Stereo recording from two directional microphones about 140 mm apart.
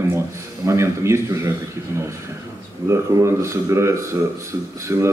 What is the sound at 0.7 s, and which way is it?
Speech, 20° right (ahead or behind).